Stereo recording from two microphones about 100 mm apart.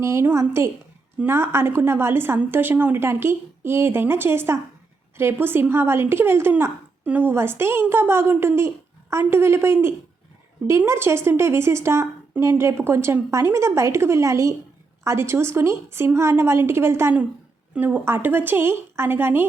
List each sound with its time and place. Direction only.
0.0 s speech: 25° right (ahead or behind)